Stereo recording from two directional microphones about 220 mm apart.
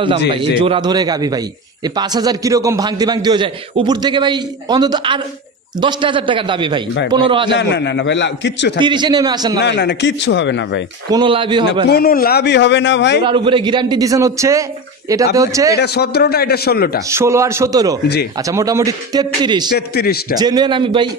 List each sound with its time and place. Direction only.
0.3 s a man's voice: 20° right (ahead or behind)
7.5 s a man's voice: 50° left (ahead or behind)
8.7 s a man's voice: 20° right (ahead or behind)
9.6 s a man's voice: 50° left (ahead or behind)
11.1 s a man's voice: 20° right (ahead or behind)
11.9 s a man's voice: 45° left (ahead or behind)
13.2 s a man's voice: 20° right (ahead or behind)
15.7 s a man's voice: 50° left (ahead or behind)
17.1 s speech: 10° right (ahead or behind)
19.7 s a man's voice: 45° left (ahead or behind)
20.3 s a man's voice: 20° right (ahead or behind)